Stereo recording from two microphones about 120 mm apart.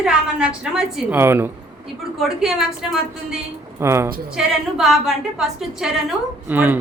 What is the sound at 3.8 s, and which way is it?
Speech, 20° right (ahead or behind).